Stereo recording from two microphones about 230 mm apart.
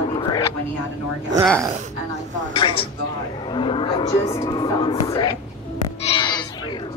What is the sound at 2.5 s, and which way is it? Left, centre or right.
Speech, left.